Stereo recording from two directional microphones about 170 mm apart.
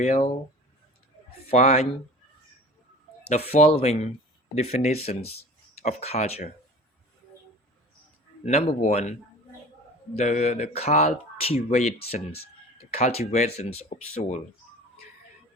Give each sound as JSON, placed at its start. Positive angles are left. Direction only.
{"t": 0.0, "sound": "speech", "side_deg": 40}
{"t": 1.5, "sound": "speech", "side_deg": 40}
{"t": 3.2, "sound": "speech", "side_deg": 40}
{"t": 8.4, "sound": "speech", "side_deg": 40}
{"t": 10.2, "sound": "speech", "side_deg": 40}